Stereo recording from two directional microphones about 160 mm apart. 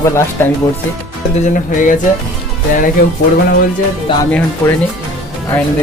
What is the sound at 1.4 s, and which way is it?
Music, 55° left (ahead or behind).